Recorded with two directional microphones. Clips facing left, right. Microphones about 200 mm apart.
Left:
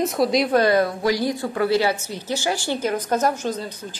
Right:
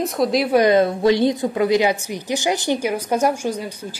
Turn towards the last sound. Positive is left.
turn(degrees=-10)  # may be behind; listen again after turning